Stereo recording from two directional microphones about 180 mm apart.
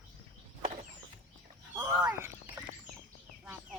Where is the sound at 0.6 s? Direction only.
40° right (ahead or behind).